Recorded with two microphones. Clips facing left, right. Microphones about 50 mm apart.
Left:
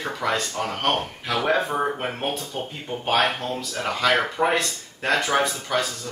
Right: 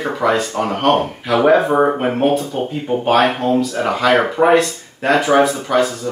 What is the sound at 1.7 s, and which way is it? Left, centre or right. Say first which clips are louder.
Speech: right 10 dB; right.